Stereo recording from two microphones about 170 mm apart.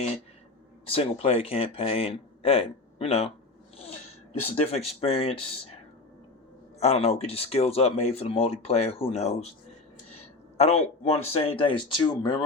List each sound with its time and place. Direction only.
0.9 s speech: 35° left (ahead or behind)
4.4 s speech: 40° left (ahead or behind)
6.7 s speech: 40° left (ahead or behind)
10.6 s speech: 40° left (ahead or behind)